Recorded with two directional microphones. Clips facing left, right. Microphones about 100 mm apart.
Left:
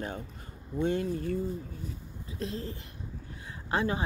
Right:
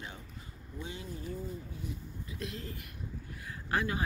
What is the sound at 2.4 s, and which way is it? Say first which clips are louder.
Speech: left 6 dB; 35° left (ahead or behind).